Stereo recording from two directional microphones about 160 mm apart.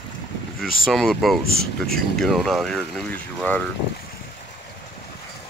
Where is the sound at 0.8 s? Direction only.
Centre (ahead or behind).